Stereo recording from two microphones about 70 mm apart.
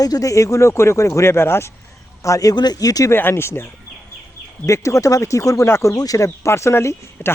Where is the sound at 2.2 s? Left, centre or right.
Left.